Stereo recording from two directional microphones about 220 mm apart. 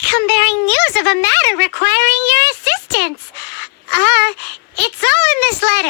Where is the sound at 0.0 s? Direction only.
50° left (ahead or behind).